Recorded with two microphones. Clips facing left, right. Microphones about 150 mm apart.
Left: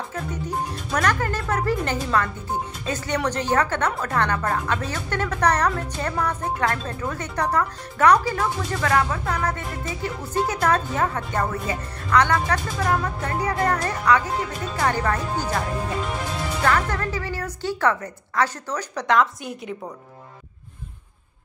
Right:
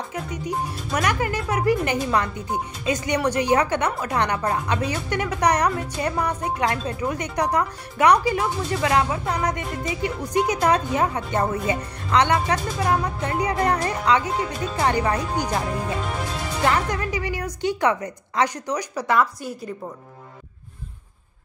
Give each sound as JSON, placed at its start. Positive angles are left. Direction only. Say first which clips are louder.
{"t": 1.0, "sound": "speech", "louder": "even", "side_deg": -10}
{"t": 16.6, "sound": "speech", "louder": "even", "side_deg": -15}